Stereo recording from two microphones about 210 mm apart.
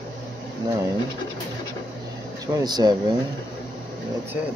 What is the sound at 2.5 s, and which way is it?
Speech, 20° right (ahead or behind).